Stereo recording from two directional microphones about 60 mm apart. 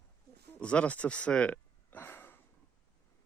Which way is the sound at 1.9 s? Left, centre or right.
Left.